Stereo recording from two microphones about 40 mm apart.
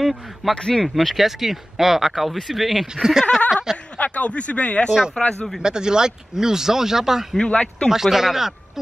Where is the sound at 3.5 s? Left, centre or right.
Centre.